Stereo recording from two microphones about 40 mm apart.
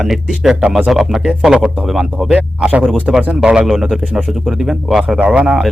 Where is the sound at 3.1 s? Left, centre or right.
Centre.